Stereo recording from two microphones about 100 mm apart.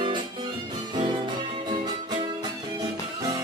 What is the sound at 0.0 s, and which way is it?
Music, 50° right (ahead or behind).